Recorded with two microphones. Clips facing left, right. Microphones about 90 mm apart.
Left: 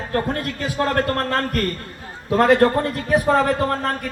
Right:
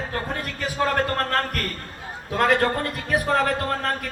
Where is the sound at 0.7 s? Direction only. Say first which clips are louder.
Left 2 dB; centre (ahead or behind).